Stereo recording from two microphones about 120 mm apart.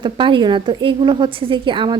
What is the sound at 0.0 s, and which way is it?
A woman's voice, 45° right (ahead or behind).